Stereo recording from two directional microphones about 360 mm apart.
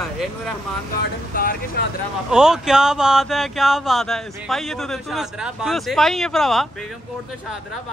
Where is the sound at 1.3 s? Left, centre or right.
Left.